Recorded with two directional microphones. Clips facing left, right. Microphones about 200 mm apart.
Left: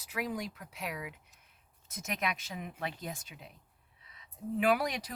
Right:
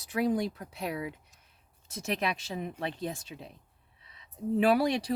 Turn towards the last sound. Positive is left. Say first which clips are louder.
# right 5 dB
turn(degrees=-30)  # may be behind; listen again after turning